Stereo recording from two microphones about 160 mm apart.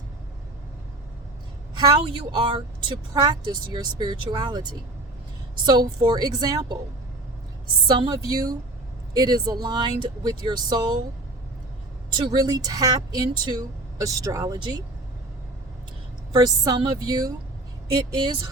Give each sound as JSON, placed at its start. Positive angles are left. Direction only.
{"t": 1.7, "sound": "speech", "side_deg": -30}
{"t": 5.6, "sound": "speech", "side_deg": -25}
{"t": 7.9, "sound": "speech", "side_deg": -30}
{"t": 12.1, "sound": "speech", "side_deg": -25}
{"t": 16.3, "sound": "speech", "side_deg": -25}